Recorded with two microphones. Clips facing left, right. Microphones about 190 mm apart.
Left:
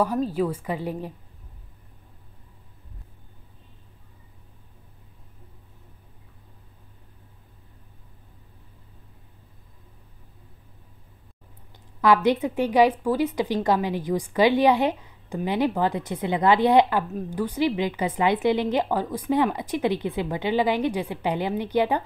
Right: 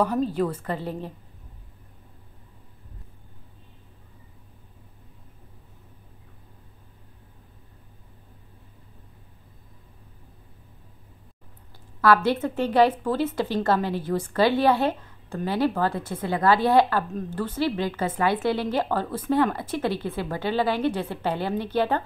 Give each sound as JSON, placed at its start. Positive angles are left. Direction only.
{"t": 0.0, "sound": "a woman's voice", "side_deg": 5}
{"t": 12.0, "sound": "a woman's voice", "side_deg": 15}